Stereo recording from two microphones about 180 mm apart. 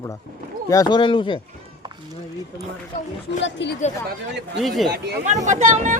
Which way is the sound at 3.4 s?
85° left.